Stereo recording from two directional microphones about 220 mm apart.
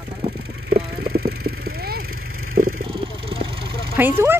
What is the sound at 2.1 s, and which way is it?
Vehicle, 70° right (ahead or behind).